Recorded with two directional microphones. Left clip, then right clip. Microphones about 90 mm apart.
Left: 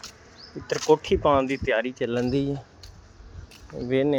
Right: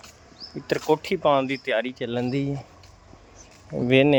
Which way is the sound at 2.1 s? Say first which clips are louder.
Left 1 dB; 30° right (ahead or behind).